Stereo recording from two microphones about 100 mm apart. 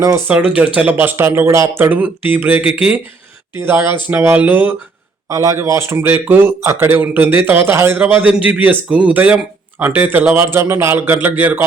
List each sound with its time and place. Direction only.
0.3 s speech: 15° right (ahead or behind)
1.1 s speech: 25° right (ahead or behind)
5.3 s speech: 30° right (ahead or behind)